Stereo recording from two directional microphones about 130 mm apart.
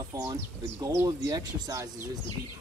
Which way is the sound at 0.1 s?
25° right (ahead or behind).